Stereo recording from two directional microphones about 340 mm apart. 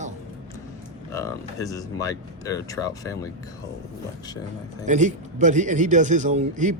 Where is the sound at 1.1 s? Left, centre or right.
Centre.